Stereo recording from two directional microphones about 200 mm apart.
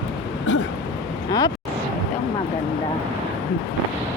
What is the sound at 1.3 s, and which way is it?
Vehicle, 20° left (ahead or behind).